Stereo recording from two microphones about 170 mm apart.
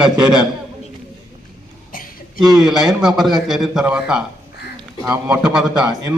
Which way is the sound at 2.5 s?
5° right (ahead or behind).